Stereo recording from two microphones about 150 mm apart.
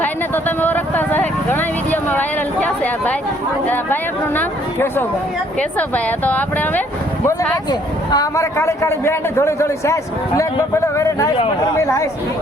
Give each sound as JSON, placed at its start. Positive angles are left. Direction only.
{"t": 0.0, "sound": "vehicle", "side_deg": 10}
{"t": 4.4, "sound": "speech", "side_deg": 15}
{"t": 7.7, "sound": "a man's voice", "side_deg": 25}